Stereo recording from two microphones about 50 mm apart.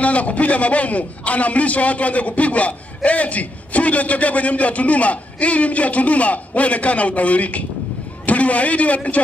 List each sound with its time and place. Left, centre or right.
0.0 s a man's voice: left